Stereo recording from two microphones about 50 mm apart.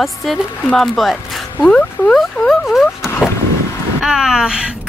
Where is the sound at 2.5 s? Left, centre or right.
Centre.